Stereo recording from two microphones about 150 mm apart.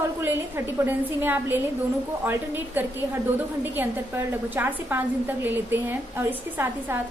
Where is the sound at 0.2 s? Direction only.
15° right (ahead or behind).